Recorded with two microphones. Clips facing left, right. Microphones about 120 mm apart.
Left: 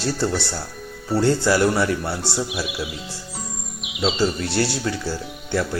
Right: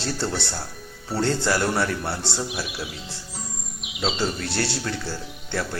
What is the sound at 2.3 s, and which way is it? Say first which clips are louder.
Speech: left 3 dB; 80° left.